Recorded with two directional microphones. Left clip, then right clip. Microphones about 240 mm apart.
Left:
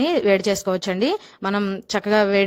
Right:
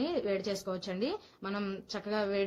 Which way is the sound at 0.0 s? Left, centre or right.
Left.